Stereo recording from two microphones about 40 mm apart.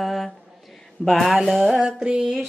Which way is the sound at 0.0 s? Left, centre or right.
Centre.